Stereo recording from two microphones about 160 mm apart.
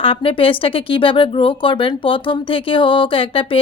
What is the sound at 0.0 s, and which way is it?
Speech, 35° left (ahead or behind).